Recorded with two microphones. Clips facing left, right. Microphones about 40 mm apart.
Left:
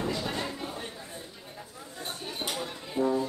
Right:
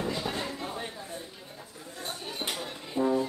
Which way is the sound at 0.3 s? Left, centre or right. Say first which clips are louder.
Even; centre.